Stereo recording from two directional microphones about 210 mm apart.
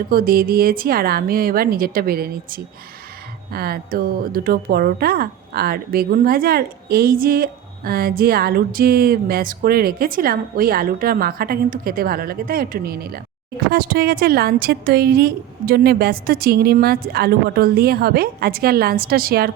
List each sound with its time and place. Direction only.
0.1 s speech: 45° right (ahead or behind)